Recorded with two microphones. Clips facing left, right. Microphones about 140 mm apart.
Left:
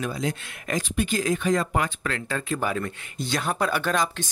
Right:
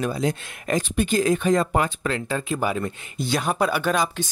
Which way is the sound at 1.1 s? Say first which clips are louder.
Right 6 dB; 45° right (ahead or behind).